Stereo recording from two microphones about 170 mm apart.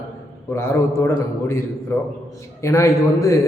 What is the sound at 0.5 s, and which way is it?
A man's voice, 15° left (ahead or behind).